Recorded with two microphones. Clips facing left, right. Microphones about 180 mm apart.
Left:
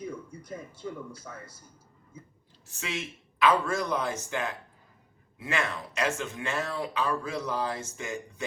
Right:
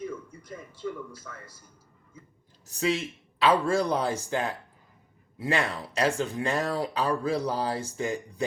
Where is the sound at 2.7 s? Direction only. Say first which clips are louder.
Right 8 dB; 35° right (ahead or behind).